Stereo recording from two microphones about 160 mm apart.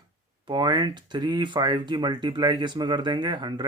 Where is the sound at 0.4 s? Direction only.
25° right (ahead or behind).